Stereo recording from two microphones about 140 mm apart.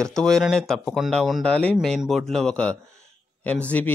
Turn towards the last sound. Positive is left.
turn(degrees=10)  # may be behind; listen again after turning